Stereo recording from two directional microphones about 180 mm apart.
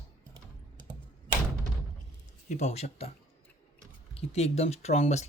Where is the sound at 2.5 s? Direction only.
40° left (ahead or behind).